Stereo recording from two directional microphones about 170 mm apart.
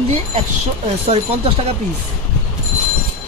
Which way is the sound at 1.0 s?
35° right (ahead or behind).